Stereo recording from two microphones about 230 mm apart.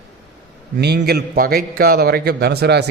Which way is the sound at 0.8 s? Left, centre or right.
Right.